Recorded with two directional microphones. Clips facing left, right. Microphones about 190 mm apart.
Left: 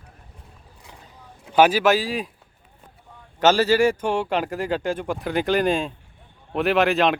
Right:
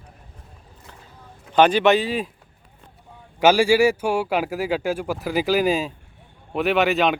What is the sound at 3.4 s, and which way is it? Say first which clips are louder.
A man's voice: right 2 dB; 10° right (ahead or behind).